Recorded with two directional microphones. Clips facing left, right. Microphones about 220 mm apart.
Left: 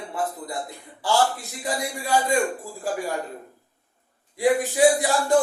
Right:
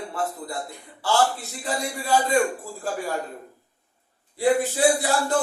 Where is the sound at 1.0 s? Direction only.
15° left (ahead or behind).